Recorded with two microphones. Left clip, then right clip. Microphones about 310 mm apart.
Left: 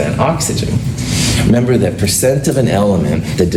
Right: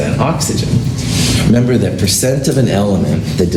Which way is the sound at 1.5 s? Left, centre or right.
Left.